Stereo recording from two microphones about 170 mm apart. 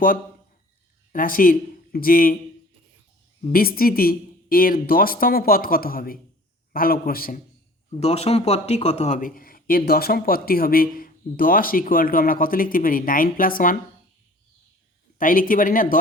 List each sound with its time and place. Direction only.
1.1 s a man's voice: 55° left (ahead or behind)
3.4 s speech: 60° left (ahead or behind)
7.9 s speech: 35° left (ahead or behind); by 13.7 s 55° left (ahead or behind)
15.2 s speech: 55° left (ahead or behind)